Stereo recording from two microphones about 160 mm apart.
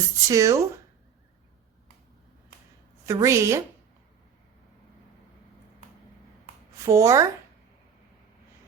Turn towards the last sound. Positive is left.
turn(degrees=-20)  # may be behind; listen again after turning